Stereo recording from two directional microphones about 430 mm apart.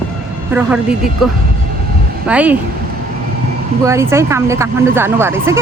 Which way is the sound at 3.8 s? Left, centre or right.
Centre.